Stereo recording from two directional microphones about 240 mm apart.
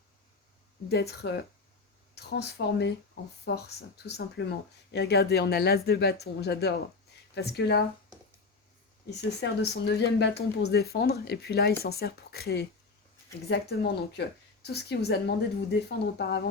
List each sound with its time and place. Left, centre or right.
0.9 s speech: left
9.0 s speech: left